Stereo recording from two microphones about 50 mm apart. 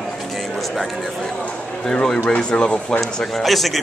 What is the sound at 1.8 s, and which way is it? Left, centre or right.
Speech, centre.